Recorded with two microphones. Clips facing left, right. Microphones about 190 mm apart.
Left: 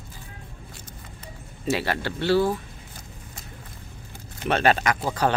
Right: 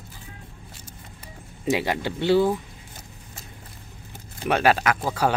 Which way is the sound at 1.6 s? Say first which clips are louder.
Right 2 dB; 15° right (ahead or behind).